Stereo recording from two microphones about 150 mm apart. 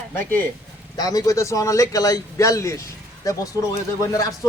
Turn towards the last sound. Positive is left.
turn(degrees=25)  # may be behind; listen again after turning